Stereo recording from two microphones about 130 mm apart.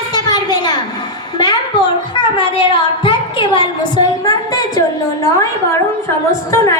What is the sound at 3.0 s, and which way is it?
A woman's voice, 40° left (ahead or behind).